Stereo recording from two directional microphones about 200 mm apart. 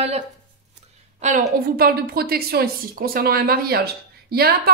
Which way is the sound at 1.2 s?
40° right (ahead or behind).